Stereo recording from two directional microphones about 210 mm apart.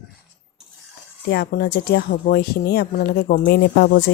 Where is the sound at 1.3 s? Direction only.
45° left (ahead or behind).